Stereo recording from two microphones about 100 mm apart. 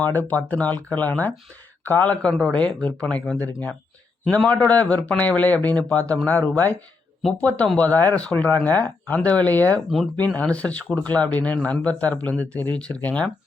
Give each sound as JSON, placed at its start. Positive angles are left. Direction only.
{"t": 0.0, "sound": "a man's voice", "side_deg": 15}